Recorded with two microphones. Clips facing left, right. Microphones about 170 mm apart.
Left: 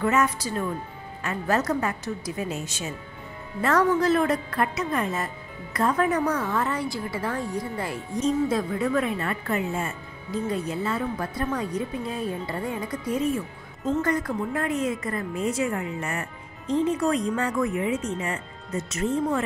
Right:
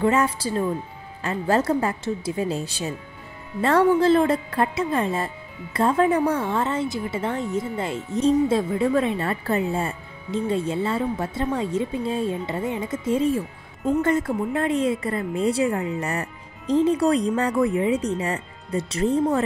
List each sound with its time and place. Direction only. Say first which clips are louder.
0.0 s a woman's voice: right 3 dB; 30° right (ahead or behind)